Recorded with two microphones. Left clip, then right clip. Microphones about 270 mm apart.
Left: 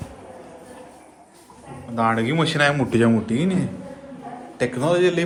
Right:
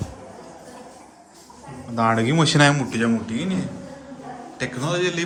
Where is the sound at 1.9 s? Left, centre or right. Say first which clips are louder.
Right 1 dB; centre.